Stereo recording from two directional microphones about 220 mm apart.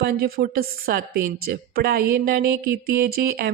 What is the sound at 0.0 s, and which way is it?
A woman's voice, 45° right (ahead or behind).